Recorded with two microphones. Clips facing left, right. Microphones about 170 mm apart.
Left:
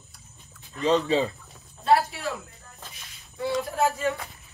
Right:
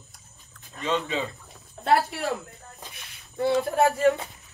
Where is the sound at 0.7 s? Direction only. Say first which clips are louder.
Left 5 dB; 35° left (ahead or behind).